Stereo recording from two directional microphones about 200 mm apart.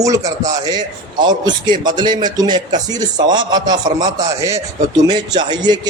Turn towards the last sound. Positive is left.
turn(degrees=-20)  # may be behind; listen again after turning